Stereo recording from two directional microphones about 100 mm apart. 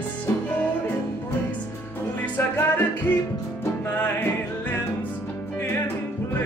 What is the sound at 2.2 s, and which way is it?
Music, 20° left (ahead or behind).